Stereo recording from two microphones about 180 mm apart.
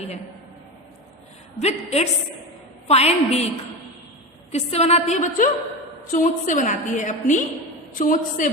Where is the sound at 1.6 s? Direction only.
35° left (ahead or behind).